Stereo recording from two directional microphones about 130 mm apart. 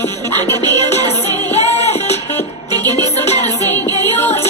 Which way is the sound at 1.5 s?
55° left (ahead or behind).